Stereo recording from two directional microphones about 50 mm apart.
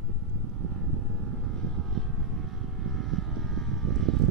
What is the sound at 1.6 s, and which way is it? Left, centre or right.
Vehicle, centre.